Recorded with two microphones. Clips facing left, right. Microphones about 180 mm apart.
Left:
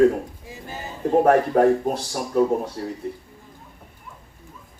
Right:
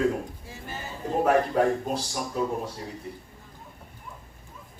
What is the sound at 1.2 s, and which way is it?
Speech, 50° left (ahead or behind).